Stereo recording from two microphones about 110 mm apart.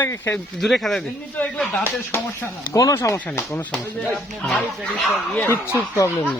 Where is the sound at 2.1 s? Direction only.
25° left (ahead or behind).